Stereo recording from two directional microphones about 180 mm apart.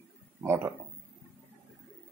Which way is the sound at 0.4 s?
15° right (ahead or behind).